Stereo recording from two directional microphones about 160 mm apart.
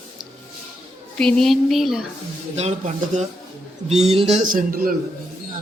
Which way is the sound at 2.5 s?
45° right (ahead or behind).